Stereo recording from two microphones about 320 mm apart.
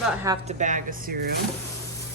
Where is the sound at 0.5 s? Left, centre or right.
Right.